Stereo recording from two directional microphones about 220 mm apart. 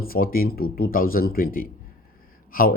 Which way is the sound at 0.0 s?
40° left (ahead or behind).